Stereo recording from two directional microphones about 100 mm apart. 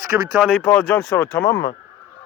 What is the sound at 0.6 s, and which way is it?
Speech, 20° left (ahead or behind).